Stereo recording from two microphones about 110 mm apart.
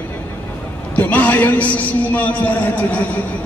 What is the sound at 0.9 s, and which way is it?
A man's voice, 15° left (ahead or behind).